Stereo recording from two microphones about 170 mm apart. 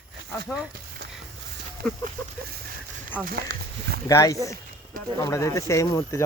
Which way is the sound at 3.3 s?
60° right (ahead or behind).